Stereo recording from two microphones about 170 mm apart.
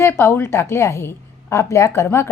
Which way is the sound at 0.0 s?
15° left (ahead or behind).